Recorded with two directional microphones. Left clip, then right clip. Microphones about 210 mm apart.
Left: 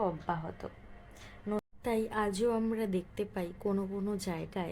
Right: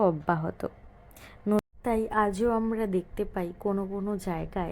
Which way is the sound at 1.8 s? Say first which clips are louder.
Right 4 dB; 15° right (ahead or behind).